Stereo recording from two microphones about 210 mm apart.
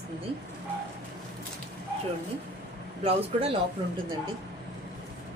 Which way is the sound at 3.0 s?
25° right (ahead or behind).